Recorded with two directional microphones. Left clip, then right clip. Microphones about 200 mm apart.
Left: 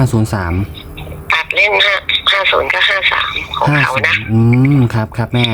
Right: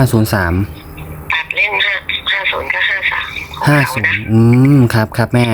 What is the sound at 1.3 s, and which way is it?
Speech, 40° left (ahead or behind).